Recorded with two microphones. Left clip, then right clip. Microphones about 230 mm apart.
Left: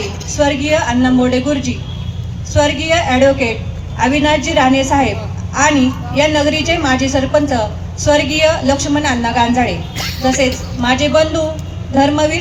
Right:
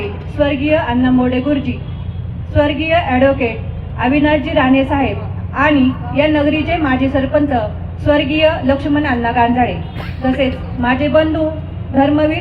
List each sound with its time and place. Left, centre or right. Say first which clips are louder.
0.3 s a woman's voice: left 1 dB; left
6.1 s a woman's voice: left 1 dB; left
10.8 s a woman's voice: left 1 dB; left